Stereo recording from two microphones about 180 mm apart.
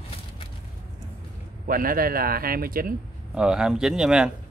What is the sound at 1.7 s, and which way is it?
Speech, 55° right (ahead or behind).